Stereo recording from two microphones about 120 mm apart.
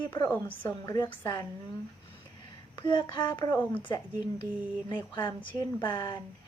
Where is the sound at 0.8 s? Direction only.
30° left (ahead or behind).